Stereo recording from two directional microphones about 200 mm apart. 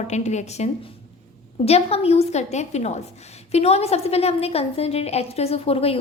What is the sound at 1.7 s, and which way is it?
A woman's voice, 30° left (ahead or behind).